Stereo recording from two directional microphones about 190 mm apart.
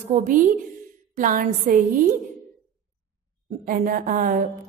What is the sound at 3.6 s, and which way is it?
Speech, 50° right (ahead or behind).